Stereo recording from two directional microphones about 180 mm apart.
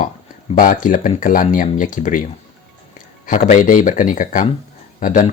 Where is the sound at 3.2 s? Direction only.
45° left (ahead or behind).